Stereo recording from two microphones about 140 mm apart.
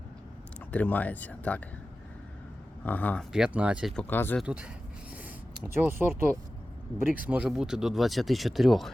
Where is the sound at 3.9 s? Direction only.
15° left (ahead or behind).